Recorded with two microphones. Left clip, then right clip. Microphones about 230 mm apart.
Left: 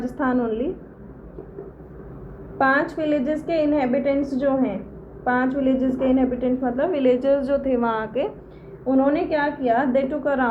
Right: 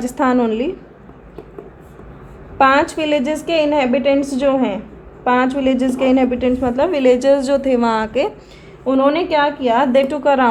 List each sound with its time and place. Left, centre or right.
0.0 s a woman's voice: right
2.6 s a woman's voice: right